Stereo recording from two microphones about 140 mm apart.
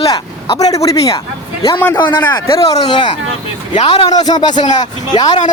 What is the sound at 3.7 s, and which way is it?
Speech, 45° left (ahead or behind).